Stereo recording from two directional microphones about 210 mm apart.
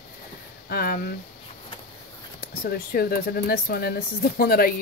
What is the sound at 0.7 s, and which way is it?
Speech, 45° left (ahead or behind).